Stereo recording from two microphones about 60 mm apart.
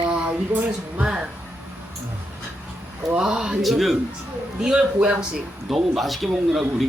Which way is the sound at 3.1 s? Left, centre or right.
Centre.